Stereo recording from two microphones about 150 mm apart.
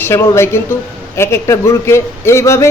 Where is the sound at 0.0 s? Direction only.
15° left (ahead or behind).